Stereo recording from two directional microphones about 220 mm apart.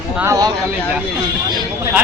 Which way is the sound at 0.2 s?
15° right (ahead or behind).